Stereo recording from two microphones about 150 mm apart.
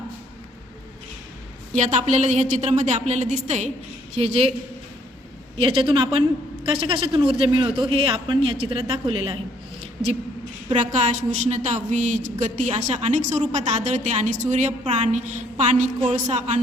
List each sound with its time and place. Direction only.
1.7 s a woman's voice: 50° right (ahead or behind)
5.5 s a man's voice: 40° right (ahead or behind)
10.8 s a woman's voice: 55° right (ahead or behind)